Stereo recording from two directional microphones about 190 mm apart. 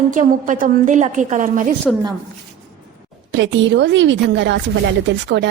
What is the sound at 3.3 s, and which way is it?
Speech, 70° right (ahead or behind).